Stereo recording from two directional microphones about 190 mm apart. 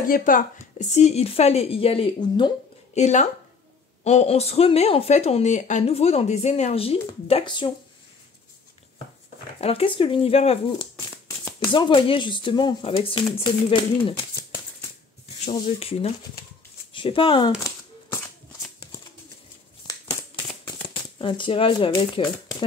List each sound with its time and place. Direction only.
0.1 s speech: 45° left (ahead or behind); by 2.5 s 25° left (ahead or behind)
2.9 s speech: 35° left (ahead or behind)
9.6 s speech: 30° left (ahead or behind)
16.9 s shuffling cards: 25° left (ahead or behind)
19.9 s a sound: 20° left (ahead or behind)
21.2 s speech: 25° left (ahead or behind)